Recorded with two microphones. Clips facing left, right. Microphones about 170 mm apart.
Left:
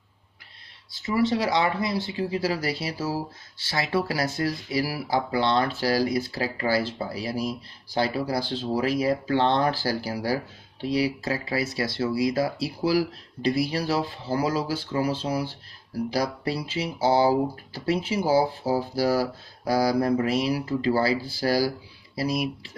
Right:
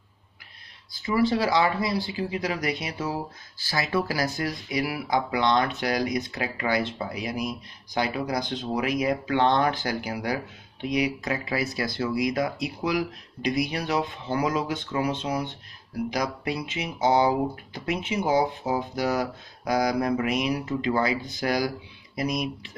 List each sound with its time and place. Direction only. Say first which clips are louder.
1.0 s speech: even; 25° left (ahead or behind)
10.3 s speech: left 3 dB; 15° right (ahead or behind)
11.1 s speech: left 1 dB; 30° left (ahead or behind)
13.4 s speech: left 2 dB; 15° right (ahead or behind)
13.7 s speech: left 1 dB; 35° left (ahead or behind)